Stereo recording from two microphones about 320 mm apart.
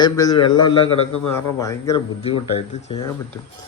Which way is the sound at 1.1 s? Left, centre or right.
Left.